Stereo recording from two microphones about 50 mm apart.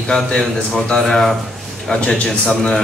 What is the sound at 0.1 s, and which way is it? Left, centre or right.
A man's voice, centre.